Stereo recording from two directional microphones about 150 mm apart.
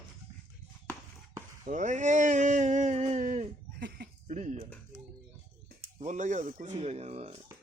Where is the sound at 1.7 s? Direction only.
55° right (ahead or behind).